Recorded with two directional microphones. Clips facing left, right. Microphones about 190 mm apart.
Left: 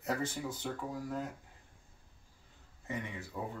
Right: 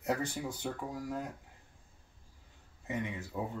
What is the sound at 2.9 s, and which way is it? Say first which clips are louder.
Speech: right 3 dB; 20° right (ahead or behind).